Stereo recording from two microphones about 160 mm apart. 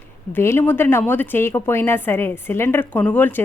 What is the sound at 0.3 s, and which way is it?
Speech, 15° left (ahead or behind).